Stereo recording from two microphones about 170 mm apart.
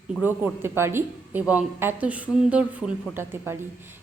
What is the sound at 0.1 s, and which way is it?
A woman's voice, 10° right (ahead or behind).